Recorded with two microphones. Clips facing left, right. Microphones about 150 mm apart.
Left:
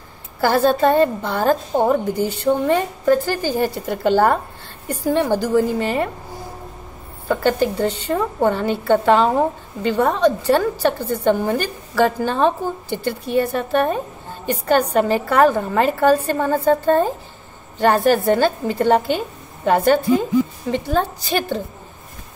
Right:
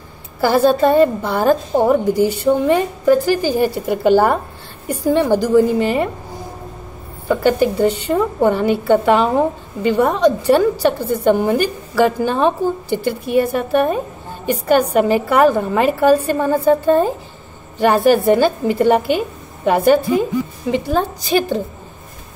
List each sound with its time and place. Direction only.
0.4 s a woman's voice: 10° right (ahead or behind)
7.2 s a woman's voice: 10° right (ahead or behind)